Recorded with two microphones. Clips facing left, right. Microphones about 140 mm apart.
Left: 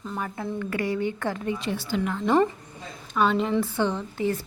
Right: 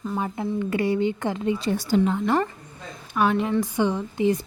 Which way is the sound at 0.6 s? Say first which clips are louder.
Right 4 dB; 25° right (ahead or behind).